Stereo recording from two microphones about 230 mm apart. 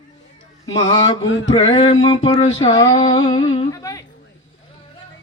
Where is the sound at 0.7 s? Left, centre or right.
Left.